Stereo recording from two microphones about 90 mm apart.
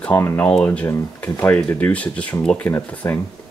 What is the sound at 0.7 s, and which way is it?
Speech, 20° left (ahead or behind).